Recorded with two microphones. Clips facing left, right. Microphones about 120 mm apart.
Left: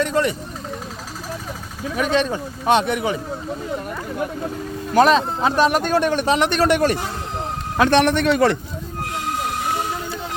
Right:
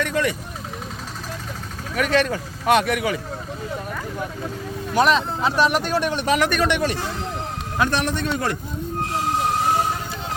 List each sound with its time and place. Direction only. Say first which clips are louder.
0.0 s speech: left 3 dB; 30° left (ahead or behind)
2.0 s speech: even; 20° left (ahead or behind)
4.9 s a man's voice: left 4 dB; 45° left (ahead or behind)
6.2 s speech: left 2 dB; 25° left (ahead or behind)
6.7 s a man's voice: left 5 dB; 45° left (ahead or behind)
7.8 s a man's voice: left 7 dB; 75° left (ahead or behind)